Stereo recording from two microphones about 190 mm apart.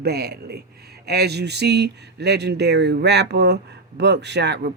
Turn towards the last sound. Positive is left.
turn(degrees=-65)  # may be behind; listen again after turning